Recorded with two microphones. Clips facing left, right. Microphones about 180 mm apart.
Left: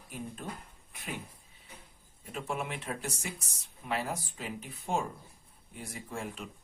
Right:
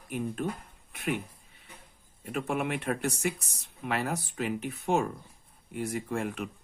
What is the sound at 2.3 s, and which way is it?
Speech, 65° right (ahead or behind).